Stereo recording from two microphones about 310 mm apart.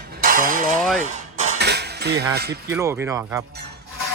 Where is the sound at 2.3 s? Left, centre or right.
Right.